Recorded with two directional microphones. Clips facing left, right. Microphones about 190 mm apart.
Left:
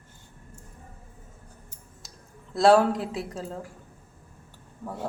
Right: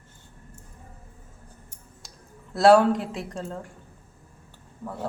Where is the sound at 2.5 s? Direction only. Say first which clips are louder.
Right 2 dB; centre (ahead or behind).